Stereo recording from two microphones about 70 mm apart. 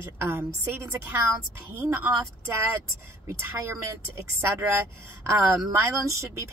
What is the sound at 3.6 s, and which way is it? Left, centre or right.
Speech, right.